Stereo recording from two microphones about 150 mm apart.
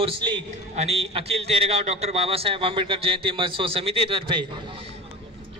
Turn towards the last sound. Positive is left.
turn(degrees=-35)  # may be behind; listen again after turning